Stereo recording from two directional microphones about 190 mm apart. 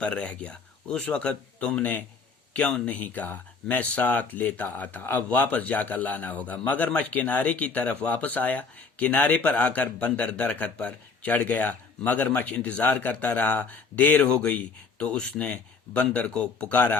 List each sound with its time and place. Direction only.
0.0 s speech: 5° left (ahead or behind)